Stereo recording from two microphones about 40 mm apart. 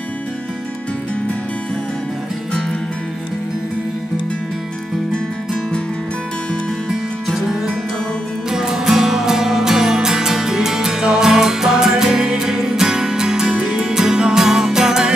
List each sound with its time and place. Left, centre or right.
8.5 s music: centre